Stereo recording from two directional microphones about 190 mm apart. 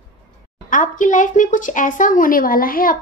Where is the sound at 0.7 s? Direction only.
40° left (ahead or behind).